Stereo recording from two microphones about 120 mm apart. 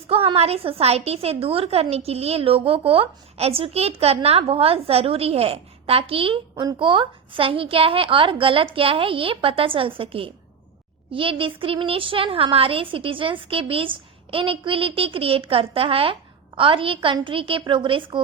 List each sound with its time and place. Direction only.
0.1 s a woman's voice: 55° right (ahead or behind)
6.6 s a woman's voice: 40° right (ahead or behind)